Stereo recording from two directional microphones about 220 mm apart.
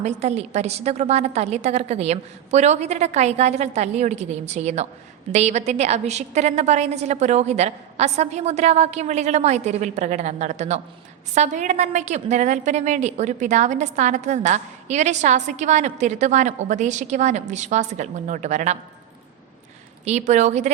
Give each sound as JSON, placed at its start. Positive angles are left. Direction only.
{"t": 0.0, "sound": "a woman's voice", "side_deg": -30}
{"t": 20.1, "sound": "a woman's voice", "side_deg": -30}